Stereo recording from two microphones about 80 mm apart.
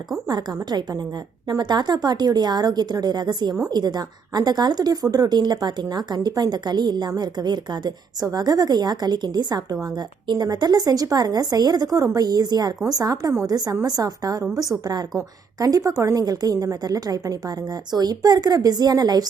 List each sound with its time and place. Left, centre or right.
0.3 s a woman's voice: right